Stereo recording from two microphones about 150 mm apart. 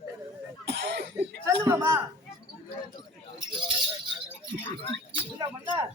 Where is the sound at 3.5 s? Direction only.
35° right (ahead or behind).